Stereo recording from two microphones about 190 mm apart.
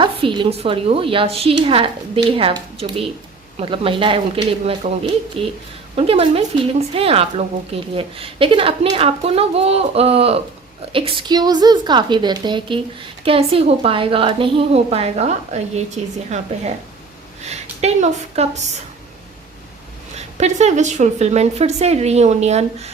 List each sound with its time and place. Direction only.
0.0 s speech: 25° right (ahead or behind)
20.1 s speech: 35° right (ahead or behind)